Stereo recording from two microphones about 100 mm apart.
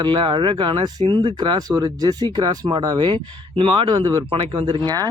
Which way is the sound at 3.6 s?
65° right (ahead or behind).